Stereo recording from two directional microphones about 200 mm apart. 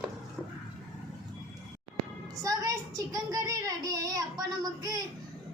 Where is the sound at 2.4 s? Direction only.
15° right (ahead or behind).